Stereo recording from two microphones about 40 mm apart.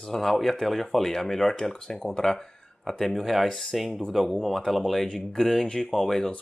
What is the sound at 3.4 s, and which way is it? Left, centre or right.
Speech, centre.